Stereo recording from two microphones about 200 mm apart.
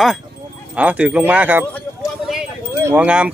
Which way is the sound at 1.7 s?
10° left (ahead or behind).